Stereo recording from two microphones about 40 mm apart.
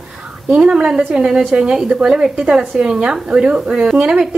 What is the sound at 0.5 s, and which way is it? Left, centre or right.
Speech, right.